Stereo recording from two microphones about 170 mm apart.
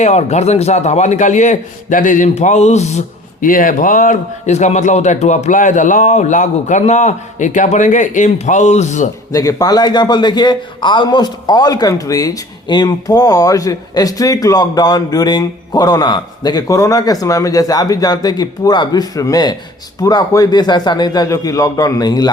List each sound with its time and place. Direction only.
0.0 s speech: 40° left (ahead or behind)
3.4 s speech: 55° left (ahead or behind)
9.3 s a man's voice: 20° left (ahead or behind)